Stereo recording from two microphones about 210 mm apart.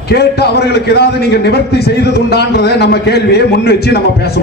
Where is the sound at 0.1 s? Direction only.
50° left (ahead or behind).